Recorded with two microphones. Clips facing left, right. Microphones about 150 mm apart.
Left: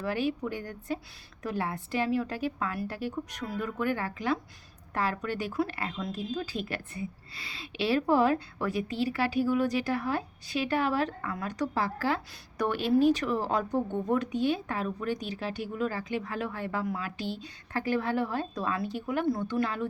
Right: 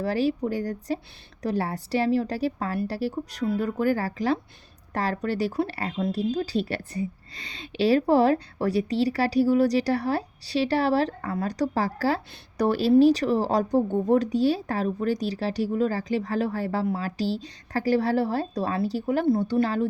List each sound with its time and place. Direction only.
0.0 s speech: 35° right (ahead or behind)